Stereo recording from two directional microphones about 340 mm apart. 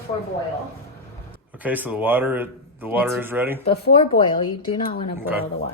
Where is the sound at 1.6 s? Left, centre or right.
Centre.